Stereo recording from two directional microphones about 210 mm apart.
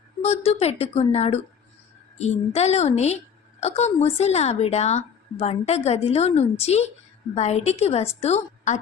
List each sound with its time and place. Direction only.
0.2 s a woman's voice: 30° left (ahead or behind)